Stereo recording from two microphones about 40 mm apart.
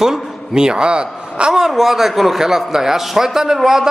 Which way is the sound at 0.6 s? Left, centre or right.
Right.